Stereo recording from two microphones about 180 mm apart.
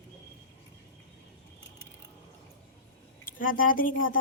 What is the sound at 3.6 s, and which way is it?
Speech, 50° left (ahead or behind).